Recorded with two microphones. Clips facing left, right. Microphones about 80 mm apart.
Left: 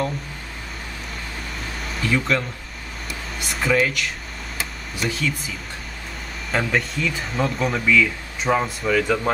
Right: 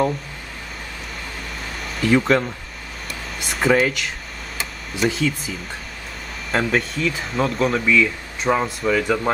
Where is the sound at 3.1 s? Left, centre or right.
Centre.